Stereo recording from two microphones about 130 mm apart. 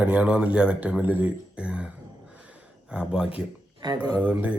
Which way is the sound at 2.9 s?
5° right (ahead or behind).